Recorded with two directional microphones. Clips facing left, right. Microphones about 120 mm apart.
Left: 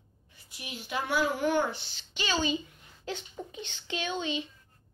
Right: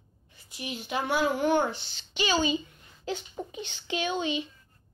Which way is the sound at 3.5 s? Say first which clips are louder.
Right 4 dB; 10° right (ahead or behind).